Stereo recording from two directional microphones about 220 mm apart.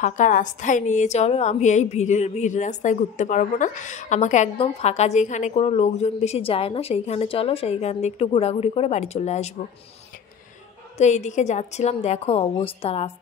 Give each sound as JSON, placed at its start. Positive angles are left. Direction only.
{"t": 0.0, "sound": "a woman's voice", "side_deg": 35}
{"t": 11.0, "sound": "a woman's voice", "side_deg": 30}